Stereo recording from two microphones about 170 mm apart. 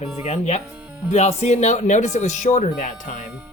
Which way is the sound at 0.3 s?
40° left (ahead or behind).